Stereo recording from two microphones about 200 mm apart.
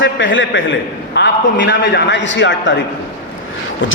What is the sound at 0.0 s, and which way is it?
A man's voice, 70° left (ahead or behind).